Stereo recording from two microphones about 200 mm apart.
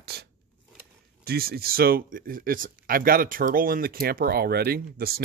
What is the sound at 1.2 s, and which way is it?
Speech, 50° right (ahead or behind).